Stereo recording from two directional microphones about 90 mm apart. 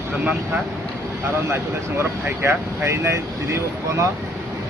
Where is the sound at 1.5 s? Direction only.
30° right (ahead or behind).